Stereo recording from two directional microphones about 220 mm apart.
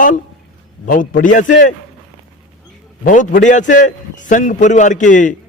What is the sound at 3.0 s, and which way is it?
A man's voice, 35° left (ahead or behind).